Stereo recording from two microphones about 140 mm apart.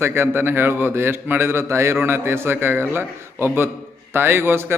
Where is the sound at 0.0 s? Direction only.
15° right (ahead or behind).